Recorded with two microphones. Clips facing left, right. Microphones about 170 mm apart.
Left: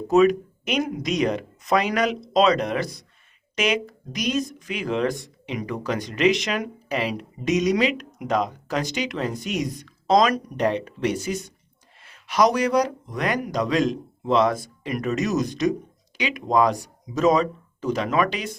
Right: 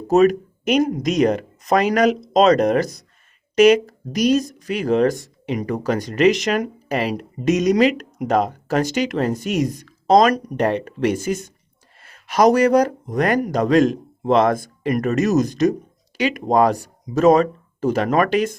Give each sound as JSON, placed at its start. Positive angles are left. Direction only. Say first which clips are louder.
{"t": 0.1, "sound": "speech", "louder": "right 3 dB", "side_deg": -40}